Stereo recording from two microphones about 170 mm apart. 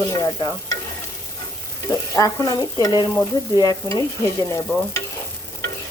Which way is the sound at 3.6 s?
20° left (ahead or behind).